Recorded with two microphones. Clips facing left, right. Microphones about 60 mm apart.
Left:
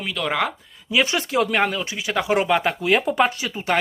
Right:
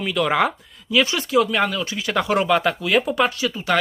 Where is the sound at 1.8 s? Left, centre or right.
Centre; by 3.7 s left.